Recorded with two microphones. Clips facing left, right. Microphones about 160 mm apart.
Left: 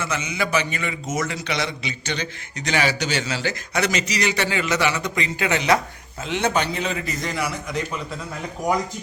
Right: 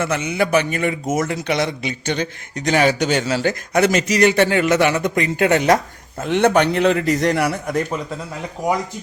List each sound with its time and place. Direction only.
0.0 s a man's voice: 55° right (ahead or behind)
6.2 s a man's voice: 60° right (ahead or behind)